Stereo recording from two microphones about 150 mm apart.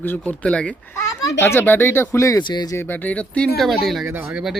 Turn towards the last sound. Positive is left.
turn(degrees=0)  # may be behind; listen again after turning